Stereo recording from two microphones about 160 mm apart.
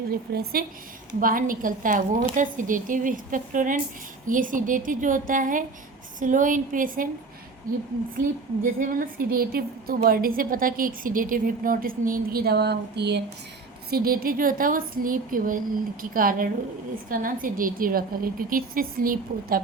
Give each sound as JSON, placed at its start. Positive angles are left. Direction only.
{"t": 0.1, "sound": "a woman's voice", "side_deg": -70}
{"t": 8.1, "sound": "a woman's voice", "side_deg": -60}
{"t": 13.9, "sound": "a woman's voice", "side_deg": -65}